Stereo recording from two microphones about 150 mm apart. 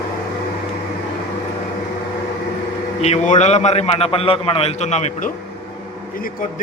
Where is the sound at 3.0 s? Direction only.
50° left (ahead or behind).